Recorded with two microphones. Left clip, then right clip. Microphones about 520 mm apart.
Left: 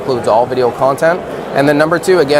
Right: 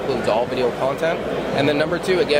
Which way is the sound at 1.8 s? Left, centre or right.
Left.